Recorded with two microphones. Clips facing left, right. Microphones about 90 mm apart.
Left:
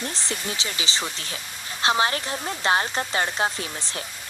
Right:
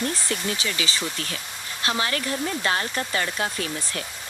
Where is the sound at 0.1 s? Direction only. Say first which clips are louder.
Right 3 dB; 25° left (ahead or behind).